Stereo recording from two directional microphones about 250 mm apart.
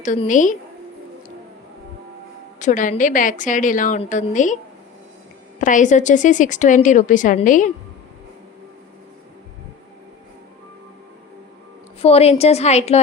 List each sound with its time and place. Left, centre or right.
0.0 s a woman's voice: left
2.6 s a woman's voice: left
5.5 s a woman's voice: left
12.0 s a woman's voice: left